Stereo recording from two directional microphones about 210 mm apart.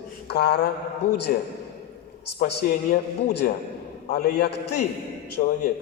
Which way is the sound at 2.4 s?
50° left (ahead or behind).